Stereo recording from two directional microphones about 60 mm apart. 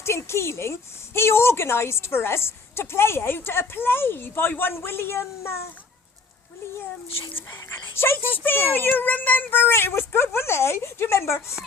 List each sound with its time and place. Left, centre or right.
0.0 s a woman's voice: left
7.9 s speech: left